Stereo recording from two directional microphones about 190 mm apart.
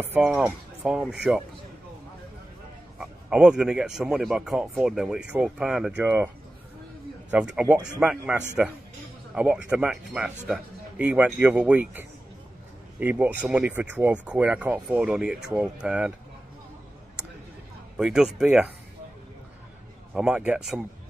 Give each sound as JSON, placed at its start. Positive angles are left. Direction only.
{"t": 0.0, "sound": "speech", "side_deg": -5}
{"t": 3.0, "sound": "speech", "side_deg": -5}
{"t": 17.9, "sound": "speech", "side_deg": -5}
{"t": 20.2, "sound": "speech", "side_deg": -5}